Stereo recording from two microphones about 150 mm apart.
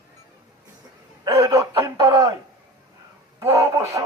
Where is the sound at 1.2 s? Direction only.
20° right (ahead or behind).